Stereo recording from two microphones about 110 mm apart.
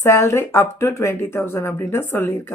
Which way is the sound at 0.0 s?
25° left (ahead or behind).